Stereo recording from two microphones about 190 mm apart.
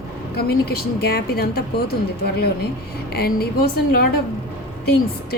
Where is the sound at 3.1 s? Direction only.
55° left (ahead or behind).